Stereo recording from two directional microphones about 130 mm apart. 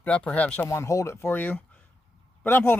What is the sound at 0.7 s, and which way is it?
Speech, 25° left (ahead or behind).